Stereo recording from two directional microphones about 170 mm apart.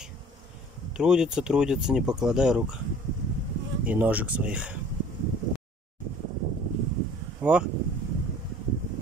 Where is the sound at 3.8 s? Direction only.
10° right (ahead or behind).